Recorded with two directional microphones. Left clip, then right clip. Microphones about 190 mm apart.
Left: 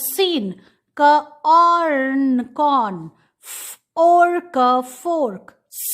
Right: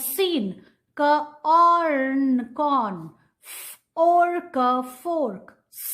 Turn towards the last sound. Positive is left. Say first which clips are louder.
# left 3 dB
turn(degrees=25)  # may be behind; listen again after turning